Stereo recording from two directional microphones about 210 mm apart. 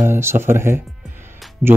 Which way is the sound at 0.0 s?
10° right (ahead or behind).